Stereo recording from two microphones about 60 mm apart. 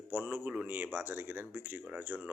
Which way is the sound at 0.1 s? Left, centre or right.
Right.